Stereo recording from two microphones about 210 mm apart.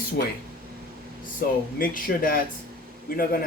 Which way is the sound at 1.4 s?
45° left (ahead or behind).